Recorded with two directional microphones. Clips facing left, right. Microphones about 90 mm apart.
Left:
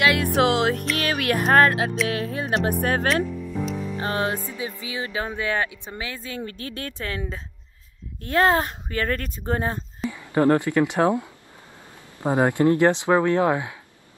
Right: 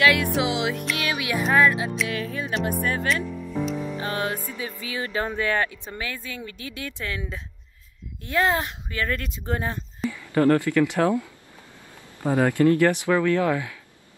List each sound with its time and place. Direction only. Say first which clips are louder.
0.0 s music: right 1 dB; 30° left (ahead or behind)
0.4 s speech: left 5 dB; 50° left (ahead or behind)
4.0 s speech: left 6 dB; 30° left (ahead or behind)
10.1 s speech: left 1 dB; 20° left (ahead or behind)